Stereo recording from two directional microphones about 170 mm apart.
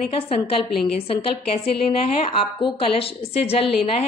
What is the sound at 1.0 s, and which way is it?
A woman's voice, 35° left (ahead or behind).